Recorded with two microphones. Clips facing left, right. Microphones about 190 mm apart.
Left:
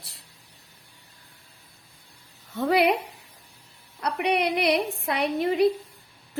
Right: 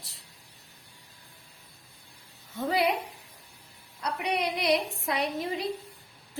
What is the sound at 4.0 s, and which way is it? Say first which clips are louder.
A woman's voice: left 5 dB; 65° left (ahead or behind).